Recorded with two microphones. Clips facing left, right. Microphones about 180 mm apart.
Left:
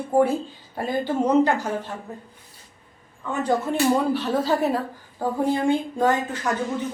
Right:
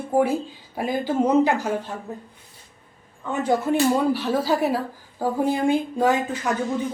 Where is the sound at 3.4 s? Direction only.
10° right (ahead or behind).